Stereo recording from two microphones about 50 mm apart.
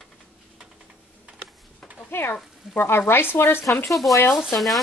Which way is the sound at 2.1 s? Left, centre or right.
Left.